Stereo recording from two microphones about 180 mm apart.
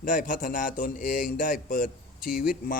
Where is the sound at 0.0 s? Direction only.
50° left (ahead or behind).